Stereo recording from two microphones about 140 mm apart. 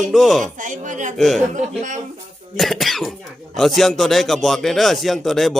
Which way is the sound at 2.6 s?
Centre (ahead or behind).